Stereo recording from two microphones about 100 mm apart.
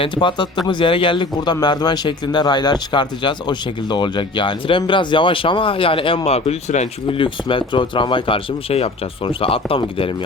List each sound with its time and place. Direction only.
0.0 s speech: 55° left (ahead or behind)
1.6 s speech: 45° left (ahead or behind); by 6.6 s 90° left
7.1 s speech: 60° left (ahead or behind)